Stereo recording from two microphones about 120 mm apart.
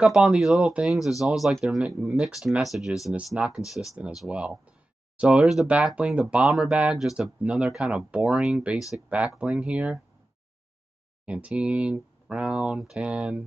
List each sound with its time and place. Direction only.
0.0 s speech: centre (ahead or behind)
11.2 s speech: 10° right (ahead or behind)